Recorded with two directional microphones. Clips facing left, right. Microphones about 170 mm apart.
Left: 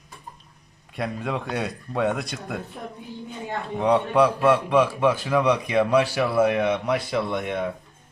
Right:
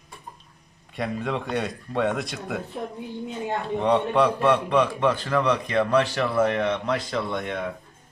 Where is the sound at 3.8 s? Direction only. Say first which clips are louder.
Left 2 dB; centre (ahead or behind).